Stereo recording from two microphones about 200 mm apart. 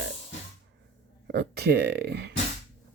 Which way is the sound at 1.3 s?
55° right (ahead or behind).